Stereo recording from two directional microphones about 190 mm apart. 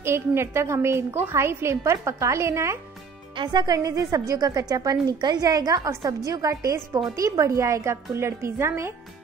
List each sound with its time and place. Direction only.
0.0 s a woman's voice: 15° right (ahead or behind)